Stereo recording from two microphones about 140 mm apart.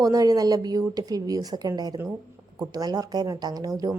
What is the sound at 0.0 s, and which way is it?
A woman's voice, 25° right (ahead or behind).